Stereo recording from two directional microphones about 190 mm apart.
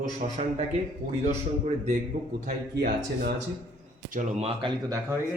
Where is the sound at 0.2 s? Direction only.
40° right (ahead or behind).